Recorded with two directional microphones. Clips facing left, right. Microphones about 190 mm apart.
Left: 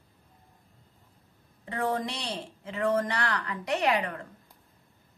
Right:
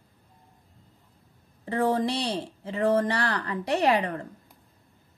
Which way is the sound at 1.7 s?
35° right (ahead or behind).